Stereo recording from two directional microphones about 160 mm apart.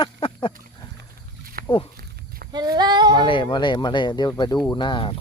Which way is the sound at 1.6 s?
65° right (ahead or behind).